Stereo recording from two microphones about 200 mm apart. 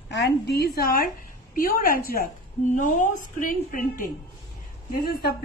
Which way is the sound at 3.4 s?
45° left (ahead or behind).